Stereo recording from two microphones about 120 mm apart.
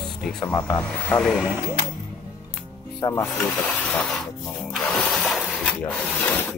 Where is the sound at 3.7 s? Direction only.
15° left (ahead or behind).